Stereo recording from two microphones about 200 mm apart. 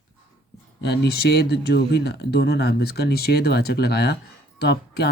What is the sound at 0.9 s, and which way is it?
Speech, 55° left (ahead or behind).